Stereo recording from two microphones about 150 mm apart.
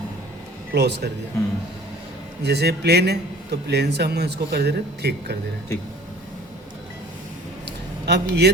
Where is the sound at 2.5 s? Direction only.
90° right.